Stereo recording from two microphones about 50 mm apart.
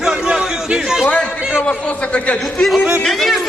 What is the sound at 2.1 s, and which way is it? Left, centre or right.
Speech, left.